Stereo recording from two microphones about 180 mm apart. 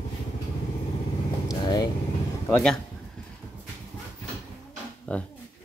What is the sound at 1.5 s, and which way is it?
Vehicle, 20° left (ahead or behind).